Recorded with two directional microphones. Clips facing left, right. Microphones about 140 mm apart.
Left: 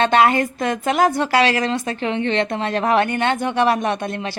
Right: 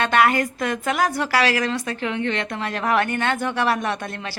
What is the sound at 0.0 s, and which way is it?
A woman's voice, 25° left (ahead or behind).